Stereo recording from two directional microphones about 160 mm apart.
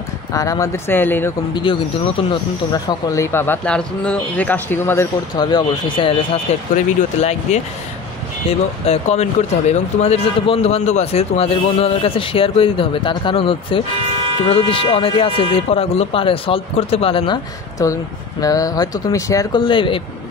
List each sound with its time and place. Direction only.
0.3 s speech: 20° left (ahead or behind)
1.5 s speech: 30° left (ahead or behind); by 5.0 s 15° left (ahead or behind)
5.3 s speech: 25° left (ahead or behind)
6.7 s speech: 50° left (ahead or behind)
17.8 s speech: 20° left (ahead or behind)